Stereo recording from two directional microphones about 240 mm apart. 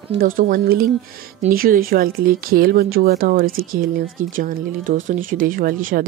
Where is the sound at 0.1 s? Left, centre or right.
Right.